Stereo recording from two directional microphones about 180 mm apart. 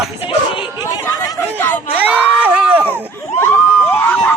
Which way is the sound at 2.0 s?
10° right (ahead or behind).